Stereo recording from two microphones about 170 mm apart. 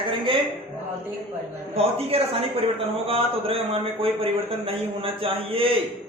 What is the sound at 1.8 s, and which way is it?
A man's voice, 35° right (ahead or behind).